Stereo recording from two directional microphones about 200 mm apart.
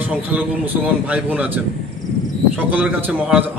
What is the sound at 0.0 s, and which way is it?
A man's voice, 10° right (ahead or behind).